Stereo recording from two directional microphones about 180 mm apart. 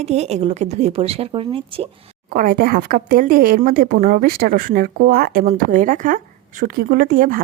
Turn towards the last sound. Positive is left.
turn(degrees=-50)  # may be behind; listen again after turning